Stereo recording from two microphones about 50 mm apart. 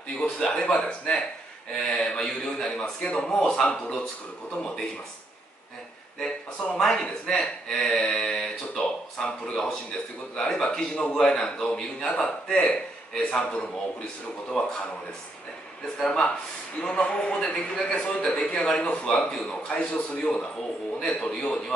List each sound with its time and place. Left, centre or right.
0.2 s speech: centre
1.9 s speech: centre
6.8 s speech: centre
16.0 s a man's voice: centre